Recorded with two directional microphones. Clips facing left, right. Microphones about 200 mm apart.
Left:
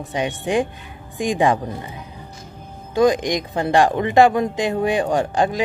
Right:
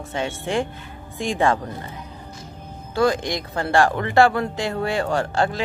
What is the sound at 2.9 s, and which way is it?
Speech, 15° left (ahead or behind).